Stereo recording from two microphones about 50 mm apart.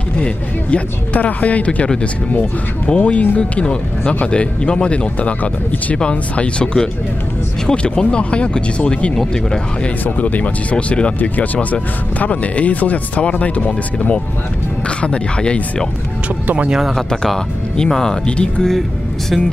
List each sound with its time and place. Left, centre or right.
0.2 s speech: left
2.9 s speech: left
9.2 s speech: centre
10.0 s speech: left
16.9 s speech: centre